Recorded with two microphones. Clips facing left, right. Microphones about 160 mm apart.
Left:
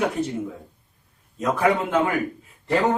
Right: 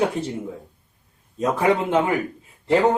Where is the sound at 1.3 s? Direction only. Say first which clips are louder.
Right 1 dB; 25° right (ahead or behind).